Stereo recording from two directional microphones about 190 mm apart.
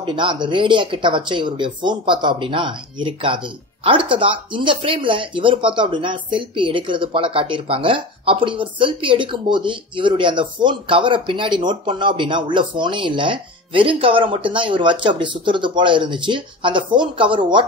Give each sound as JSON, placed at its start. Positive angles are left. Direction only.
{"t": 0.0, "sound": "speech", "side_deg": -25}